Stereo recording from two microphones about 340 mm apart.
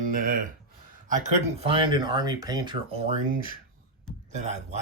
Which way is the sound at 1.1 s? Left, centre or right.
Right.